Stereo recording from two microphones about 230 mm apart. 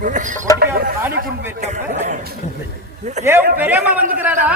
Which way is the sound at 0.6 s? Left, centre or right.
Right.